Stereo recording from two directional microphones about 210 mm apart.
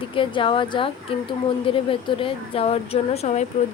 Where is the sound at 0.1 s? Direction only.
25° left (ahead or behind).